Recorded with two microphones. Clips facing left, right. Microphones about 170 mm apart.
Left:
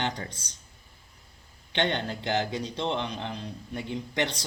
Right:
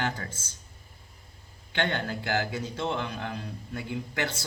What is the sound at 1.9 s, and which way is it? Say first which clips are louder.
A man's voice: left 1 dB; 20° left (ahead or behind).